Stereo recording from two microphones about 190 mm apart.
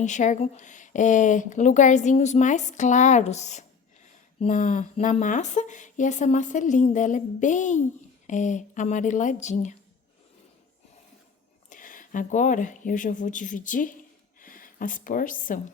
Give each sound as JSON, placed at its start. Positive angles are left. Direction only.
{"t": 0.0, "sound": "speech", "side_deg": 40}
{"t": 11.7, "sound": "speech", "side_deg": 45}